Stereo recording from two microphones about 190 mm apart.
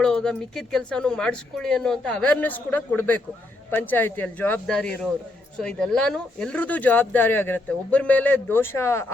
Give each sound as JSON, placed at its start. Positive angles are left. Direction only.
{"t": 0.0, "sound": "speech", "side_deg": 5}